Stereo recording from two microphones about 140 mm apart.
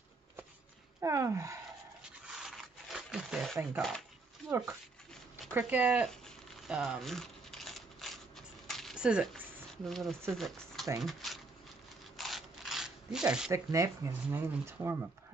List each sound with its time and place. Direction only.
1.0 s speech: 20° right (ahead or behind)
2.2 s a sound: 5° right (ahead or behind)
3.7 s speech: centre (ahead or behind)
4.5 s speech: 15° right (ahead or behind)
6.0 s crumpling: centre (ahead or behind)
8.6 s a sound: centre (ahead or behind)
9.8 s speech: centre (ahead or behind)
12.2 s a sound: centre (ahead or behind)
13.5 s speech: 20° right (ahead or behind)